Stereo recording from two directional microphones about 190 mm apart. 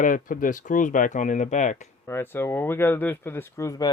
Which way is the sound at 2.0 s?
10° left (ahead or behind).